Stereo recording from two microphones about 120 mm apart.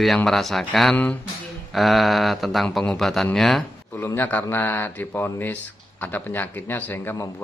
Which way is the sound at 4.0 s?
20° left (ahead or behind).